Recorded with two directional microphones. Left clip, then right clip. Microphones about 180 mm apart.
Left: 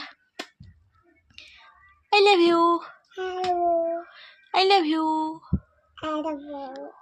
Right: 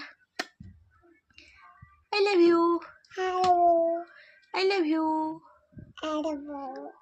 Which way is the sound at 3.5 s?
25° right (ahead or behind).